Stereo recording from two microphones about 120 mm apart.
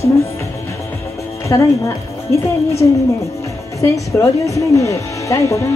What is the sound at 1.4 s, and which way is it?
Speech, 25° left (ahead or behind).